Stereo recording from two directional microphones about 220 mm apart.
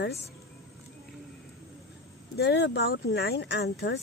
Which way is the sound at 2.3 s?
50° left (ahead or behind).